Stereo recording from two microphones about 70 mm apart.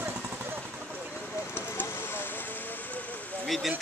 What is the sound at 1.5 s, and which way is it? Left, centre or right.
Vehicle, left.